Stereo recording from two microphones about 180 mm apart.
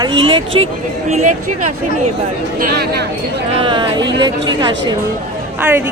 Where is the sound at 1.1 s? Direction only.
40° right (ahead or behind).